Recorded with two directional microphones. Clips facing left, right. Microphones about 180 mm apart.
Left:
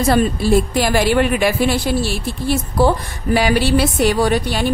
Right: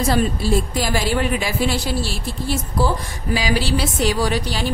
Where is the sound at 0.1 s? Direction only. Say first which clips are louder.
Left 6 dB; 60° left (ahead or behind).